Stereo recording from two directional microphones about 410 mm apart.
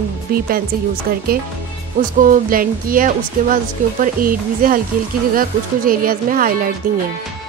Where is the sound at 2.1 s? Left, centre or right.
Centre.